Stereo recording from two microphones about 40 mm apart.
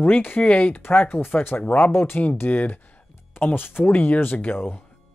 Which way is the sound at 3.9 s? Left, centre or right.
Left.